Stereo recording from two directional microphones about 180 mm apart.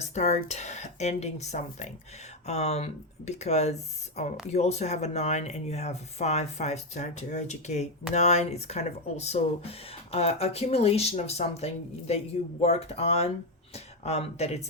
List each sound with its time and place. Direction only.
0.1 s speech: 40° left (ahead or behind)